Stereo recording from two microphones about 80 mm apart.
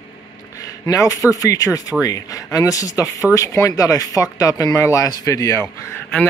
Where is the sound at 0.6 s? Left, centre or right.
Left.